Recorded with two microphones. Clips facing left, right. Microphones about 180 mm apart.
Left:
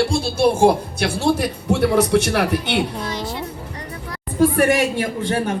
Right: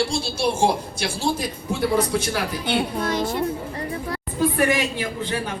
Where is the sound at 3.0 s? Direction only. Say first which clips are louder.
Right 3 dB; 50° right (ahead or behind).